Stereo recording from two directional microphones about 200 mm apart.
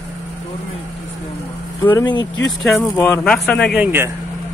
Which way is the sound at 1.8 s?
10° left (ahead or behind).